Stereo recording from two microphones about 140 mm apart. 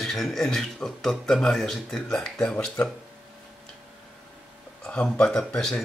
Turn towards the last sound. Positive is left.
turn(degrees=5)  # may be behind; listen again after turning